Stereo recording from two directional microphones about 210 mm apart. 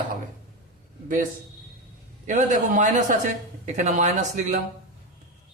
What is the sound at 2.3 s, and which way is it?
Speech, 35° right (ahead or behind).